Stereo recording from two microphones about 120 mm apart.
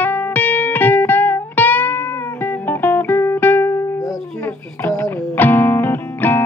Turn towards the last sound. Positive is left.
turn(degrees=15)  # may be behind; listen again after turning